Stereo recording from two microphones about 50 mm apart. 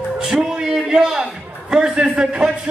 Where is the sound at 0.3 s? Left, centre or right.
Centre.